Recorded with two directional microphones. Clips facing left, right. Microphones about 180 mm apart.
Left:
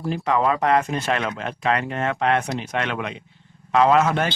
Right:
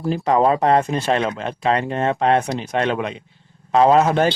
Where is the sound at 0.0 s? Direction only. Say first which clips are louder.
Right 4 dB; 35° right (ahead or behind).